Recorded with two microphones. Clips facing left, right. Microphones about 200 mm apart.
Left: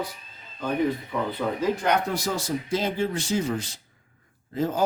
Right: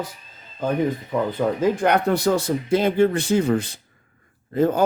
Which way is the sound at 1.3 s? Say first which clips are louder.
Right 5 dB; 50° right (ahead or behind).